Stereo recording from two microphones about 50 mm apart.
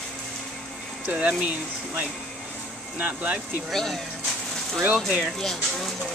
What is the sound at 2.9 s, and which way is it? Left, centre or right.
Speech, right.